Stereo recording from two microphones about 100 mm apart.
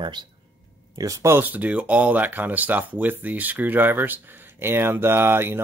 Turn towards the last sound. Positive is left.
turn(degrees=-25)  # may be behind; listen again after turning